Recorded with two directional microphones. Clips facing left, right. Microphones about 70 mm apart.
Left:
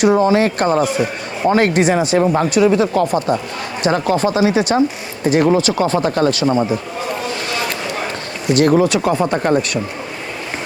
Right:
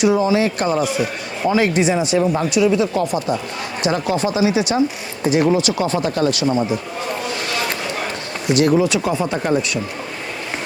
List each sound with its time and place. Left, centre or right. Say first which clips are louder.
0.0 s speech: left 3 dB; left
8.5 s speech: left 3 dB; left